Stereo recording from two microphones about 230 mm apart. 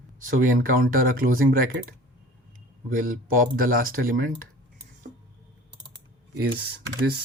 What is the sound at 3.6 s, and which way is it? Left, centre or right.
Speech, right.